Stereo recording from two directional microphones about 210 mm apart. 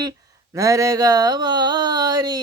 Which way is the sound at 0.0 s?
15° right (ahead or behind).